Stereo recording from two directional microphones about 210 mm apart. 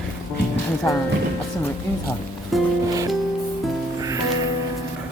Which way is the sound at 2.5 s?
Centre (ahead or behind).